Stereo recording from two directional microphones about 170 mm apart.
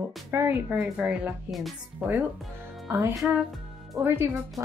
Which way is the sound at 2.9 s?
15° right (ahead or behind).